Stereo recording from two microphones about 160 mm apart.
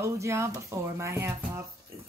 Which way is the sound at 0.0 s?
15° right (ahead or behind).